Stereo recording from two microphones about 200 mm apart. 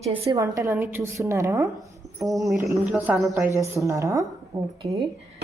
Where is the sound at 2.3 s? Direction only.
Centre (ahead or behind).